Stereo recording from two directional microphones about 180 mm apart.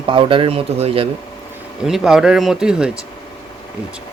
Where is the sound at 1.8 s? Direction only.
Centre (ahead or behind).